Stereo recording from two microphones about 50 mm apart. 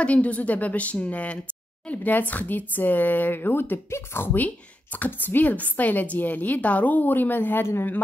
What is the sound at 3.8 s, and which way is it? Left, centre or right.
Speech, left.